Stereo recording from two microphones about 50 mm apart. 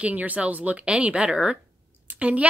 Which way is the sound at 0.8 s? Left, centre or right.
Right.